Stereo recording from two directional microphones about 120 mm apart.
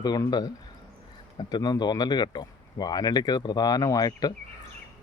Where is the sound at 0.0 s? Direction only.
35° left (ahead or behind).